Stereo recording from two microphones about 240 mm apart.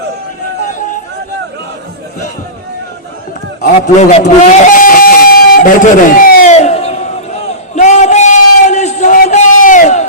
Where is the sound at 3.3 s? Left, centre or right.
Left.